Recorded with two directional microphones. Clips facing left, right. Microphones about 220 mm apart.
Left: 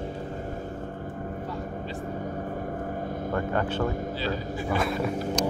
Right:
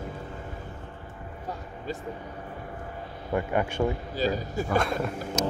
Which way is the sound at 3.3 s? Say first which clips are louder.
Right 2 dB; 15° right (ahead or behind).